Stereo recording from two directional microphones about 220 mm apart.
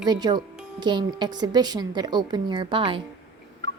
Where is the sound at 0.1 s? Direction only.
20° right (ahead or behind).